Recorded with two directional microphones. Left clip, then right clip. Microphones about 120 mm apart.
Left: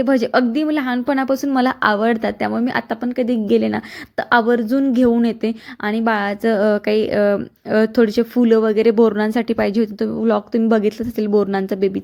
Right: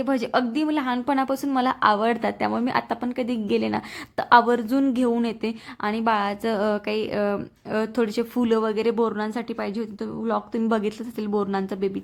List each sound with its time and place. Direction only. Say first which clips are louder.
0.0 s a woman's voice: left 7 dB; 30° left (ahead or behind); by 4.9 s 10° left (ahead or behind)
5.2 s a woman's voice: left 7 dB; 25° left (ahead or behind); by 10.2 s 40° left (ahead or behind)
10.2 s a woman's voice: left 7 dB; 30° left (ahead or behind)